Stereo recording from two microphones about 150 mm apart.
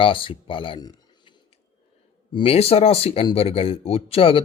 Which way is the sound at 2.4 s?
40° left (ahead or behind).